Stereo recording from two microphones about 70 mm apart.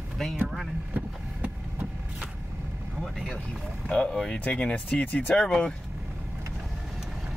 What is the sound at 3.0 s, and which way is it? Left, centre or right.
Speech, centre.